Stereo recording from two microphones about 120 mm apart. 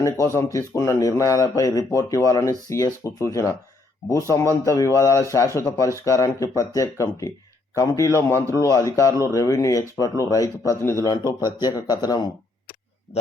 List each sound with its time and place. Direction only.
0.0 s speech: 25° left (ahead or behind)